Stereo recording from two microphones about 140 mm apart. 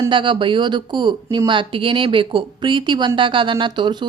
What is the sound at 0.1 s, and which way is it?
Speech, 35° right (ahead or behind).